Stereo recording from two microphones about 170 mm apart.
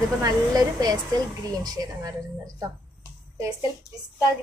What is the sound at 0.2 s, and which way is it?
A woman's voice, 20° right (ahead or behind).